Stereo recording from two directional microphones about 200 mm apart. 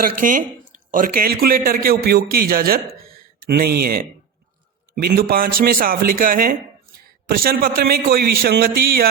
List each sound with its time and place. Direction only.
0.0 s a man's voice: 45° right (ahead or behind)